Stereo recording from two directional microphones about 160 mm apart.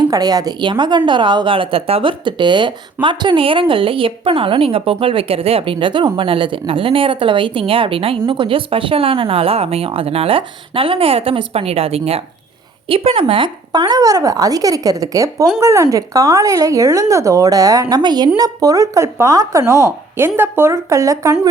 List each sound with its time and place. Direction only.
0.0 s a woman's voice: 25° right (ahead or behind)